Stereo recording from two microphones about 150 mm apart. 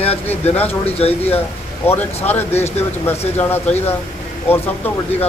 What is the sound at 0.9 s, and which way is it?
Speech, 40° left (ahead or behind).